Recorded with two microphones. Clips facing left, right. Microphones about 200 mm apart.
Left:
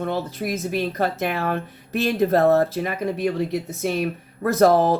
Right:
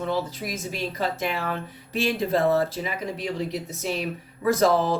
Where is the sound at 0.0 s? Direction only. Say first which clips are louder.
Left 2 dB; 55° left (ahead or behind).